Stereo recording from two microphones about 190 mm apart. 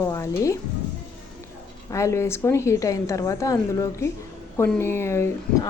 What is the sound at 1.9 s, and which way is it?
Speech, 15° left (ahead or behind).